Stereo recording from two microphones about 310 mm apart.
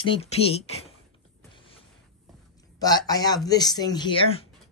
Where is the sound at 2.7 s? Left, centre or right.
Centre.